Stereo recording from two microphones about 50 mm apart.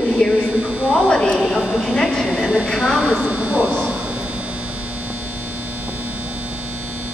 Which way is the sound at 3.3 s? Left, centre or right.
Right.